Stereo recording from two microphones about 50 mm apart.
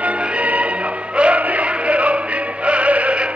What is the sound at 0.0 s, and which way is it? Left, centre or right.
Music, right.